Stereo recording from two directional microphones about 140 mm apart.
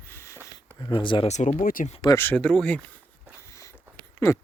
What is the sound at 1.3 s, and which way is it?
Speech, 60° left (ahead or behind).